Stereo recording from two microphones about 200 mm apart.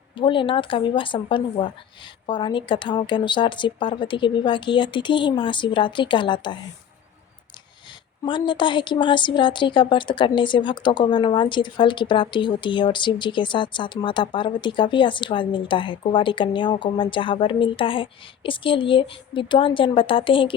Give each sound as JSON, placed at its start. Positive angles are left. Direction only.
{"t": 0.2, "sound": "a woman's voice", "side_deg": 25}
{"t": 8.2, "sound": "a woman's voice", "side_deg": 25}